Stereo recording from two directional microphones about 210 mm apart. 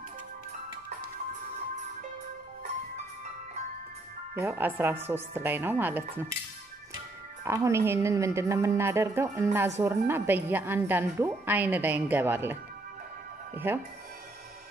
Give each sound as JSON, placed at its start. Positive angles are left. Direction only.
{"t": 4.4, "sound": "a woman's voice", "side_deg": -10}
{"t": 7.4, "sound": "a woman's voice", "side_deg": -15}
{"t": 13.7, "sound": "a woman's voice", "side_deg": -10}